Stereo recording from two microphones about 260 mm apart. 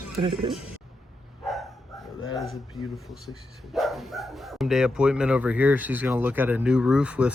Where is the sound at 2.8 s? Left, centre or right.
Centre.